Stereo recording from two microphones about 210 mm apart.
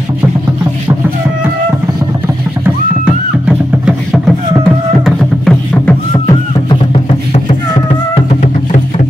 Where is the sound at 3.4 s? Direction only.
Centre (ahead or behind).